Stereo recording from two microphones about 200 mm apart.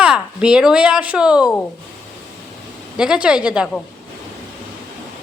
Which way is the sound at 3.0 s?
5° right (ahead or behind).